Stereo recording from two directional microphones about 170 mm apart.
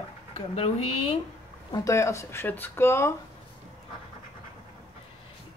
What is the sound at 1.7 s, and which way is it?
Speech, 20° left (ahead or behind).